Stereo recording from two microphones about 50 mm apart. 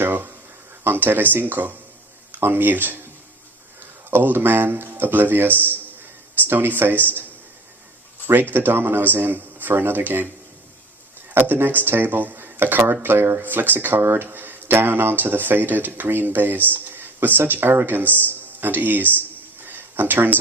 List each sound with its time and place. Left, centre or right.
0.0 s a sound: right
0.9 s speech: right
4.1 s speech: right
8.3 s speech: right
11.3 s speech: right
18.6 s a sound: right